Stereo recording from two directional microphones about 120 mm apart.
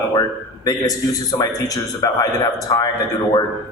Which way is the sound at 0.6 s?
30° left (ahead or behind).